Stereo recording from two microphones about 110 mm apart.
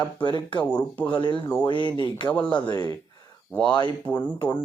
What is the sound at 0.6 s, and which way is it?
Speech, 15° left (ahead or behind).